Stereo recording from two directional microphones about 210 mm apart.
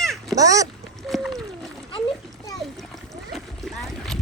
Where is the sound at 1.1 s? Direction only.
Centre (ahead or behind).